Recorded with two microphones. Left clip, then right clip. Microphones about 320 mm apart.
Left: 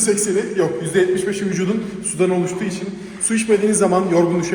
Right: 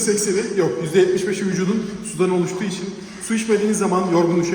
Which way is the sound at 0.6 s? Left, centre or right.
Centre.